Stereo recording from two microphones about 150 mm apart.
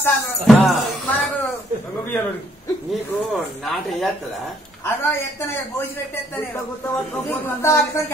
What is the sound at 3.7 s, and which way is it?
Speech, centre (ahead or behind).